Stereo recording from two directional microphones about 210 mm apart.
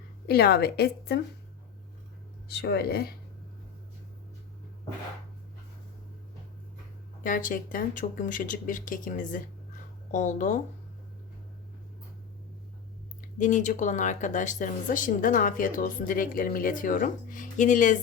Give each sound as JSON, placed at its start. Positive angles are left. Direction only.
{"t": 0.3, "sound": "a woman's voice", "side_deg": 50}
{"t": 2.5, "sound": "a woman's voice", "side_deg": 50}
{"t": 7.2, "sound": "speech", "side_deg": 40}
{"t": 13.2, "sound": "speech", "side_deg": 35}